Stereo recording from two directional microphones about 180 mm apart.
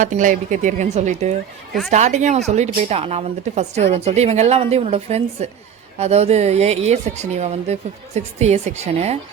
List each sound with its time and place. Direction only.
0.0 s speech: 45° right (ahead or behind)